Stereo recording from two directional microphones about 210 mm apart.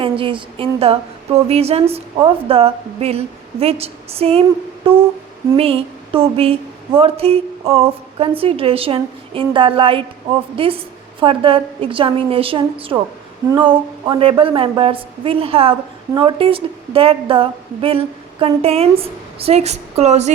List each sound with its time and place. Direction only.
0.0 s a woman's voice: 25° right (ahead or behind)